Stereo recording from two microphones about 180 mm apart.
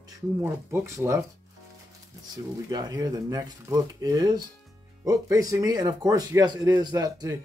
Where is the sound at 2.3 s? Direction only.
20° right (ahead or behind).